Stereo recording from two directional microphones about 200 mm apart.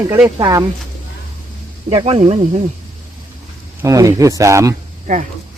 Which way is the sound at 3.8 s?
15° right (ahead or behind).